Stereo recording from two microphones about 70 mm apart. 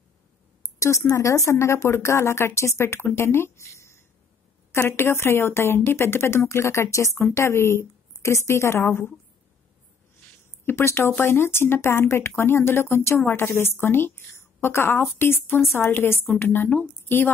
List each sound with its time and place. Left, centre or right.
0.7 s speech: left
10.6 s a woman's voice: left